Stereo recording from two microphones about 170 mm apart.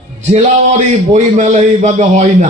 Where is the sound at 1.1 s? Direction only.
45° right (ahead or behind).